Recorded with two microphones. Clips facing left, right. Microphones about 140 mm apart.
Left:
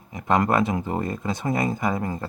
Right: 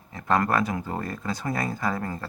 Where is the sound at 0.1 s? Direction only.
15° left (ahead or behind).